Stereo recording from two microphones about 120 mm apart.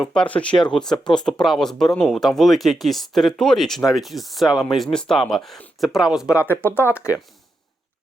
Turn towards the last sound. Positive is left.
turn(degrees=20)  # may be behind; listen again after turning